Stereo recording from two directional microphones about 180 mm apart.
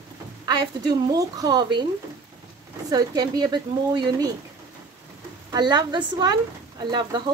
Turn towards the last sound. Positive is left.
turn(degrees=-25)  # may be behind; listen again after turning